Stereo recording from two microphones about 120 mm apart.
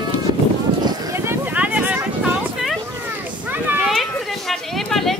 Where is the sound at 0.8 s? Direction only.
25° right (ahead or behind).